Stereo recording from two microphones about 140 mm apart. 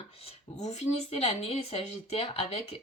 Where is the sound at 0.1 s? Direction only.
45° left (ahead or behind).